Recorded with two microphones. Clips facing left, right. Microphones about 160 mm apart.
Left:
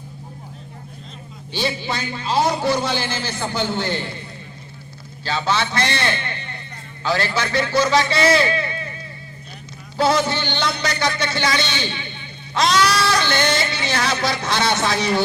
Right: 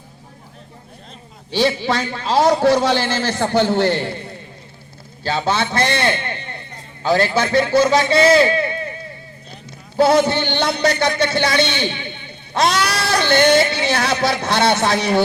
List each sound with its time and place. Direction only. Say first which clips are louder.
1.5 s a man's voice: right 7 dB; 85° right; by 8.2 s 50° right (ahead or behind)
8.4 s a sound: right 5 dB; 50° right (ahead or behind)
10.0 s a man's voice: right 5 dB; 55° right (ahead or behind)